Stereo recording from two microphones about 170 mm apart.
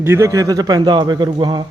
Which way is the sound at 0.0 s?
15° right (ahead or behind).